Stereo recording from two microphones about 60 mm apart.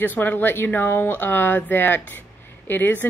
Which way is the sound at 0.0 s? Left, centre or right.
Left.